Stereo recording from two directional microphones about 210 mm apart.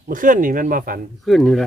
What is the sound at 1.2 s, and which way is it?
Speech, centre (ahead or behind).